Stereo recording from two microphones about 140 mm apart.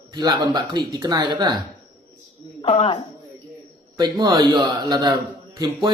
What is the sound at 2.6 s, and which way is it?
Speech, 45° left (ahead or behind).